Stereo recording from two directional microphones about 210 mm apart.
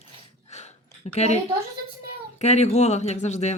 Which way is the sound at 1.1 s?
30° left (ahead or behind).